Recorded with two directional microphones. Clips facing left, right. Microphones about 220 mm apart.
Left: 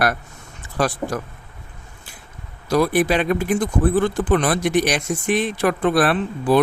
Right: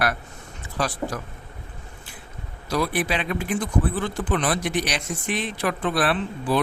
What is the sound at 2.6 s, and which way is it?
Speech, 50° left (ahead or behind).